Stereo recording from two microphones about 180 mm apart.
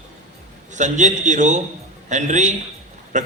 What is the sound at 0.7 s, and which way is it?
A man's voice, 40° right (ahead or behind).